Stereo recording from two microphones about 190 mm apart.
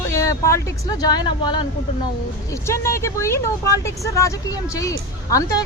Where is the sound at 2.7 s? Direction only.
15° left (ahead or behind).